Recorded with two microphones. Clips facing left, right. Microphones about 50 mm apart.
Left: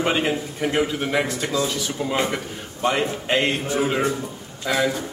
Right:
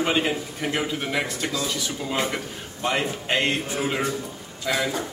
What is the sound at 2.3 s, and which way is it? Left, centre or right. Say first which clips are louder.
Speech: left 2 dB; centre.